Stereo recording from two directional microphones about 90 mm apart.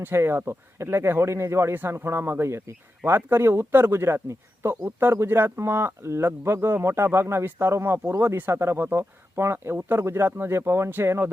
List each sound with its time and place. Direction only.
0.0 s speech: 25° right (ahead or behind)